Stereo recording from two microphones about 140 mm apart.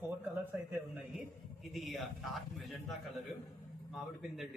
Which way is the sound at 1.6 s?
Centre (ahead or behind).